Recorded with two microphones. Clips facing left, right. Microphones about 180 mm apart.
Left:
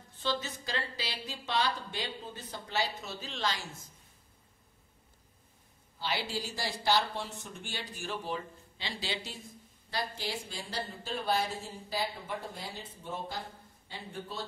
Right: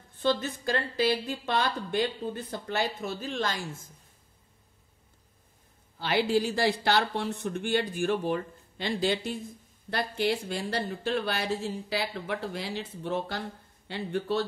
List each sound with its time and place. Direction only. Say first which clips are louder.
0.2 s speech: right 7 dB; 50° right (ahead or behind)
5.9 s speech: right 10 dB; 55° right (ahead or behind); by 14.4 s 75° right (ahead or behind)